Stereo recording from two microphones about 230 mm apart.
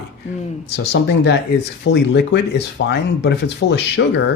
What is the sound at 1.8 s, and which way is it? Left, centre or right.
Speech, left.